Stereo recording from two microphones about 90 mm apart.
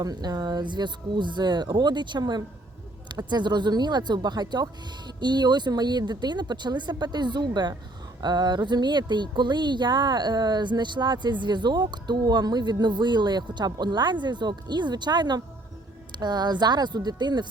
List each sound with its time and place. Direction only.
0.0 s speech: 45° right (ahead or behind)